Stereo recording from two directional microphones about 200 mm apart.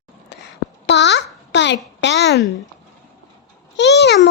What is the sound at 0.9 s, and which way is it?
A child's voice, 60° left (ahead or behind).